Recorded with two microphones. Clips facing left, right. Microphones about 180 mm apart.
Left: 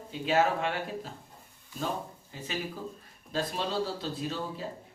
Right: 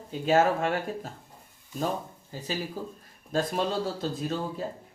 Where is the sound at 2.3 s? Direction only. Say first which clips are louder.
Right 3 dB; 35° right (ahead or behind).